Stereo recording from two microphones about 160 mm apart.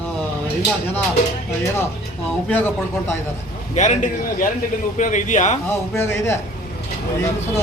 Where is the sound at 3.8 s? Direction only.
50° left (ahead or behind).